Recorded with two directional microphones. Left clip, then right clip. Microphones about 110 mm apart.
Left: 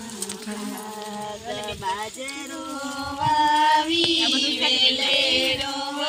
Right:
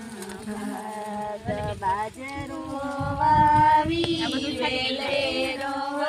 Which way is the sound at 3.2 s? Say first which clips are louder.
Right 1 dB; 15° right (ahead or behind).